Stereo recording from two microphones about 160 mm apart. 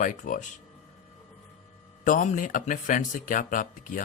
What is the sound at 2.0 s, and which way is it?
Speech, 50° left (ahead or behind).